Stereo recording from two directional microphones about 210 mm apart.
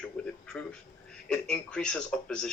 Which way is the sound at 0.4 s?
5° left (ahead or behind).